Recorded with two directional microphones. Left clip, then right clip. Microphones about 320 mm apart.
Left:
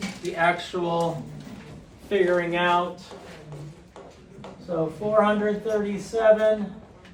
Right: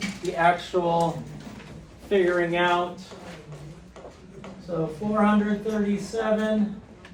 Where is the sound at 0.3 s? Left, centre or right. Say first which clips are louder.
Right 2 dB; centre.